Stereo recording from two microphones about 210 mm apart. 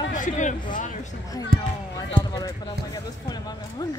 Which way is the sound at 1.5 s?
45° right (ahead or behind).